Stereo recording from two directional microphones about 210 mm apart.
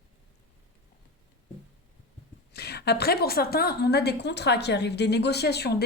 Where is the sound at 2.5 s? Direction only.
50° left (ahead or behind).